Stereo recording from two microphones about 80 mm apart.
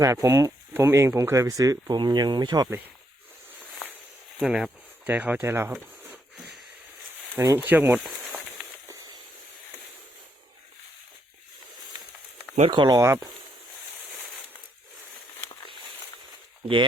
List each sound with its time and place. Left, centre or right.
0.0 s speech: right
2.0 s speech: right
4.4 s speech: centre
5.0 s speech: right
7.3 s speech: right
7.9 s speech: centre
12.7 s speech: right
13.0 s speech: right